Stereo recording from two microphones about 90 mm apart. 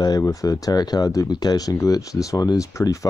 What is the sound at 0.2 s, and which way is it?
Speech, 40° left (ahead or behind).